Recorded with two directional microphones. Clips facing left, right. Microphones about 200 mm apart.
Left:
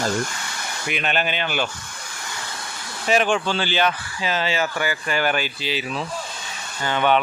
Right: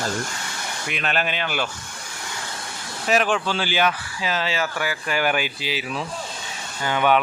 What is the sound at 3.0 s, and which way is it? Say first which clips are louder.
A man's voice: left 1 dB; centre (ahead or behind).